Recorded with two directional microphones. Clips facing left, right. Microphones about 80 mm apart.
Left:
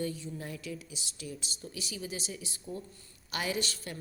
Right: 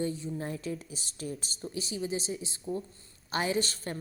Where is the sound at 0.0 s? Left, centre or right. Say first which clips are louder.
Right 4 dB; right.